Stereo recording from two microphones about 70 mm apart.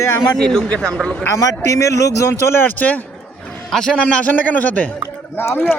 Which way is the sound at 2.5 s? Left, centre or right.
Left.